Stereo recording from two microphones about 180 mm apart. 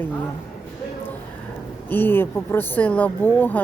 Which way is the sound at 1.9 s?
10° left (ahead or behind).